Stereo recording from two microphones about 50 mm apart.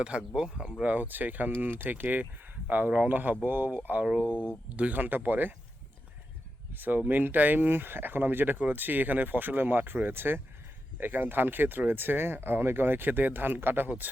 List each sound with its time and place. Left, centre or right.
0.0 s speech: centre
0.8 s speech: right
6.7 s speech: right